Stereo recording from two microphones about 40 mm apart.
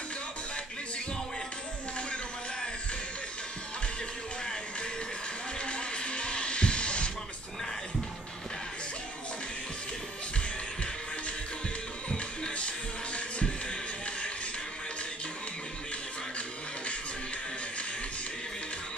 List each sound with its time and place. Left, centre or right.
5.6 s music: left
12.1 s music: left